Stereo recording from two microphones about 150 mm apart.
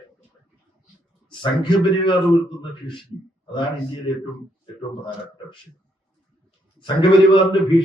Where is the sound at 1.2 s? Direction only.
30° left (ahead or behind).